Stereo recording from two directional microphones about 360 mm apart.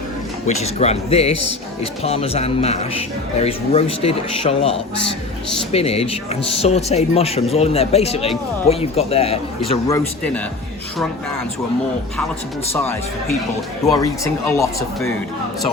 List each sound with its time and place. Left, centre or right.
0.4 s speech: centre
13.9 s speech: centre